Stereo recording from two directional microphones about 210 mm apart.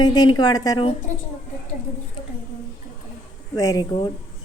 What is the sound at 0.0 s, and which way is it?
Speech, 20° left (ahead or behind).